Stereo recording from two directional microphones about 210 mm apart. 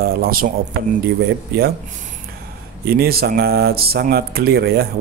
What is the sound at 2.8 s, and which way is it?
Speech, 45° right (ahead or behind).